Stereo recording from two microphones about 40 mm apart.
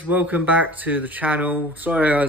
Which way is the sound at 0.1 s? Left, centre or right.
Right.